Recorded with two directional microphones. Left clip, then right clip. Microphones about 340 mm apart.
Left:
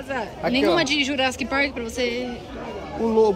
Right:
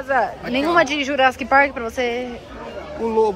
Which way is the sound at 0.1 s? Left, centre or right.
Centre.